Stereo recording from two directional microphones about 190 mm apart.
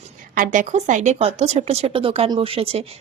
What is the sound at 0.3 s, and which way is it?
Speech, 45° right (ahead or behind).